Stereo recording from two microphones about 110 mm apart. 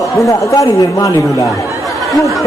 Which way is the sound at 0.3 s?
30° left (ahead or behind).